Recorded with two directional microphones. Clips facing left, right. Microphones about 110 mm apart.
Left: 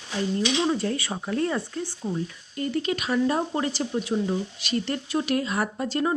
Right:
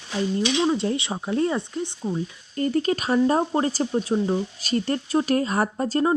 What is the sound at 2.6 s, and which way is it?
A woman's voice, 40° right (ahead or behind).